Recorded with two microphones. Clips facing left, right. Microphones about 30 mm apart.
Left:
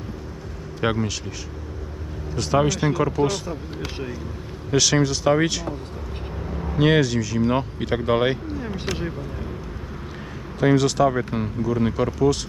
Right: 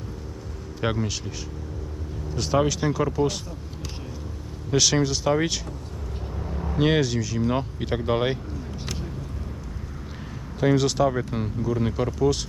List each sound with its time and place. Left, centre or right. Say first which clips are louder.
0.8 s speech: left 3 dB; centre
2.3 s speech: left 2 dB; centre
2.8 s speech: left 3 dB; left
3.2 s speech: left 2 dB; left
3.5 s speech: left 7 dB; left
4.7 s speech: left 2 dB; centre
6.7 s speech: left 3 dB; centre
7.4 s speech: left 3 dB; centre
10.8 s speech: left 3 dB; centre
11.1 s speech: left 3 dB; left
11.3 s speech: left 3 dB; centre